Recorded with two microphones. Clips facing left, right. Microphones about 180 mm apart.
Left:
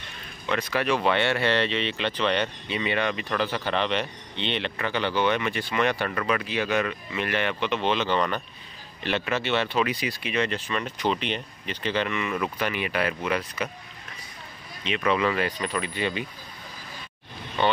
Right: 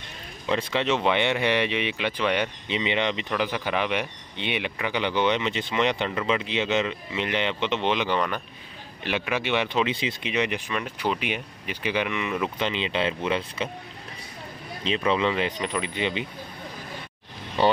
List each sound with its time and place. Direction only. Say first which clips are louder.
0.5 s speech: right 1 dB; 25° right (ahead or behind)
14.8 s speech: right 1 dB; 30° right (ahead or behind)
17.6 s speech: right 3 dB; 35° right (ahead or behind)